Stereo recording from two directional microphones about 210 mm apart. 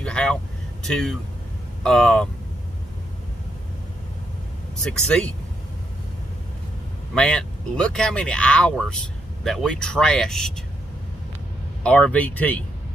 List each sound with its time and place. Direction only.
0.0 s vehicle: 5° left (ahead or behind)
0.8 s speech: centre (ahead or behind)
4.8 s speech: 5° left (ahead or behind)
7.2 s speech: 5° left (ahead or behind)
11.8 s speech: 5° left (ahead or behind)